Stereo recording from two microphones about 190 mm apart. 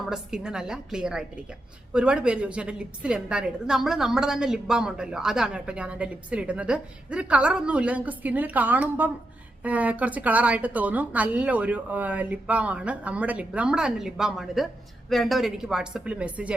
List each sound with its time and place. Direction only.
0.1 s a woman's voice: 5° right (ahead or behind)